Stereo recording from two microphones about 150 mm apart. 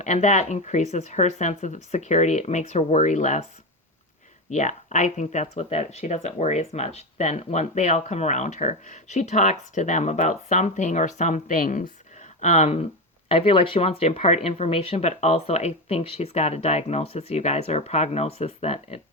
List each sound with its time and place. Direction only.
0.0 s speech: 50° left (ahead or behind)
4.5 s speech: 55° left (ahead or behind)